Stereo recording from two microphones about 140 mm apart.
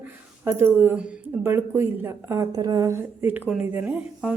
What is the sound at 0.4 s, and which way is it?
Speech, 15° right (ahead or behind).